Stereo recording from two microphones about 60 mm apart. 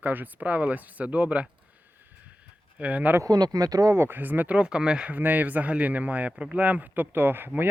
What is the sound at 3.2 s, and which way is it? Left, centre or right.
Speech, right.